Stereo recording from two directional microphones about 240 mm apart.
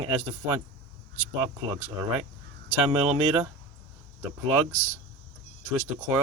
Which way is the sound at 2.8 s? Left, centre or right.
Right.